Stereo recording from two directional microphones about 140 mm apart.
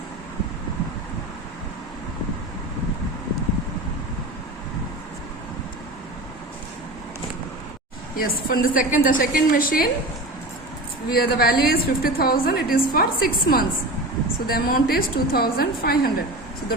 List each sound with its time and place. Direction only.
8.1 s a woman's voice: 90° left
11.1 s a woman's voice: 90° left